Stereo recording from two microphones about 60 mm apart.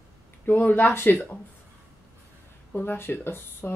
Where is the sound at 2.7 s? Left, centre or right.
Left.